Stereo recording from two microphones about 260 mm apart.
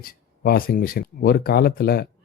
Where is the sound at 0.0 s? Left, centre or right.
Left.